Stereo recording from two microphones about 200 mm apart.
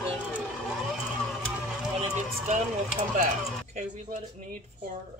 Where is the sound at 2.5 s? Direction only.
35° right (ahead or behind).